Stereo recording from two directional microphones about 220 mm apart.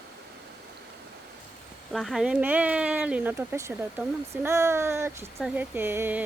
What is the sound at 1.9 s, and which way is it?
Speech, centre (ahead or behind).